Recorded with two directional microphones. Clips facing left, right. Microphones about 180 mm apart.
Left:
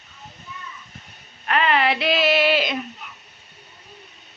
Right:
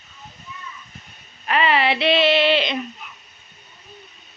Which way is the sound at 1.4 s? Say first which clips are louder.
Right 1 dB; centre (ahead or behind).